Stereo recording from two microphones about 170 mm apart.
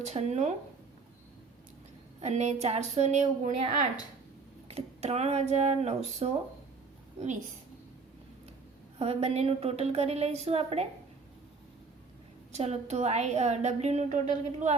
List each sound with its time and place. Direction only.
0.0 s a woman's voice: 40° right (ahead or behind)
2.2 s a woman's voice: 40° right (ahead or behind)
9.0 s a woman's voice: 35° right (ahead or behind)
12.5 s a woman's voice: 40° right (ahead or behind)